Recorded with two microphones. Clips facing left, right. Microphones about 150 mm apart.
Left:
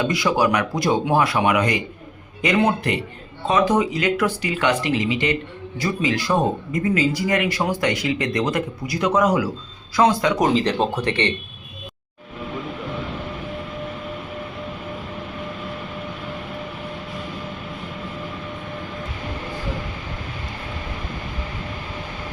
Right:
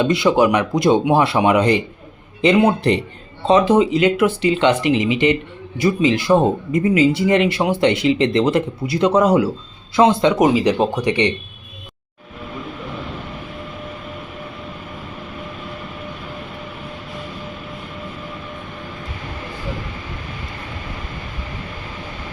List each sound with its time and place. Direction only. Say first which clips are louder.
0.0 s speech: right 5 dB; 25° right (ahead or behind)
10.5 s speech: right 3 dB; 10° right (ahead or behind)